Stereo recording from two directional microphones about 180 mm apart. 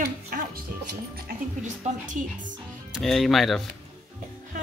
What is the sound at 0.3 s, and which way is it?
Music, 55° right (ahead or behind).